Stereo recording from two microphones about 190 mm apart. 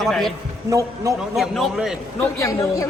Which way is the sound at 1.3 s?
Centre (ahead or behind).